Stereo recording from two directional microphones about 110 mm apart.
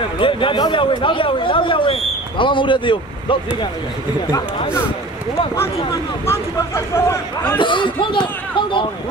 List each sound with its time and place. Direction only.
0.2 s speech: 50° left (ahead or behind)
6.2 s speech: 25° left (ahead or behind)
7.5 s speech: 50° left (ahead or behind)